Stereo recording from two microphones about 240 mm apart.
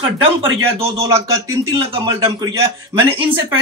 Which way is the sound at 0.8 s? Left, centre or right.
Right.